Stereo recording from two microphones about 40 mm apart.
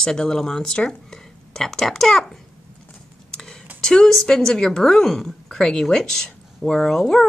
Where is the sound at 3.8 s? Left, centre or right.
Centre.